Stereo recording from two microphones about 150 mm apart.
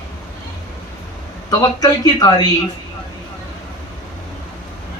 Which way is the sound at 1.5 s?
25° left (ahead or behind).